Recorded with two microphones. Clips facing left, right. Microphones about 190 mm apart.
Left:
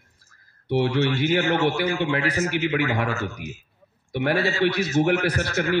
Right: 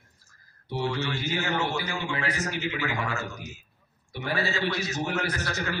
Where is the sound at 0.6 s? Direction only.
65° left (ahead or behind).